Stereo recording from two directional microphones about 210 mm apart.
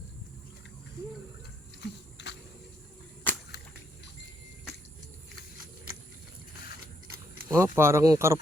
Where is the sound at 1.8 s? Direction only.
55° left (ahead or behind).